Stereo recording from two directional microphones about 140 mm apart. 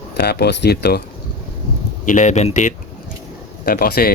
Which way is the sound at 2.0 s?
65° left (ahead or behind).